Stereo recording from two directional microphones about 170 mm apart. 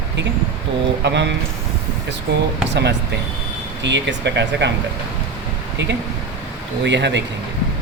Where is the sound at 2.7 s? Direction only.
90° right.